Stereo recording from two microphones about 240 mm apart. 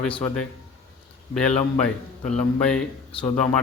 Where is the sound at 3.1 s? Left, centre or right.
Left.